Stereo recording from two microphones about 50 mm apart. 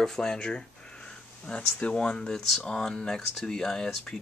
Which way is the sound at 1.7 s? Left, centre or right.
Centre.